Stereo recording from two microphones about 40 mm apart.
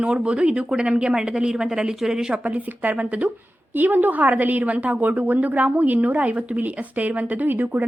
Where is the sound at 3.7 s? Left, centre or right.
Right.